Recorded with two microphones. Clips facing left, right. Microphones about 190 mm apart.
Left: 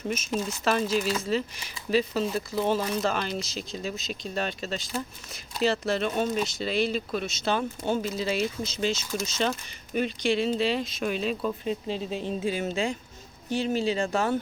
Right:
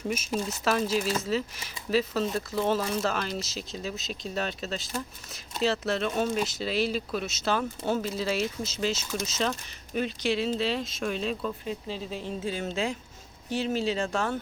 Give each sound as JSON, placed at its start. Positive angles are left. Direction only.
{"t": 0.4, "sound": "speech", "side_deg": -5}
{"t": 11.6, "sound": "a woman's voice", "side_deg": 20}
{"t": 12.7, "sound": "speech", "side_deg": 0}